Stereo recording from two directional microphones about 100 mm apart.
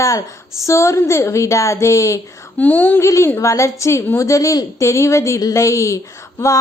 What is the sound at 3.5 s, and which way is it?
Speech, 30° left (ahead or behind).